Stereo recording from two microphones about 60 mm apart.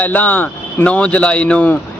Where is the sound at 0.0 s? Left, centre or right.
Left.